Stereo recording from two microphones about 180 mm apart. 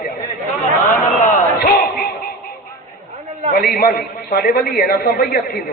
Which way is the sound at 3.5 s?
55° left (ahead or behind).